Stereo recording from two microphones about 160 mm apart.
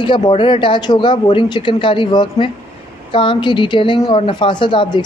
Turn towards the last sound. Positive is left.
turn(degrees=30)  # may be behind; listen again after turning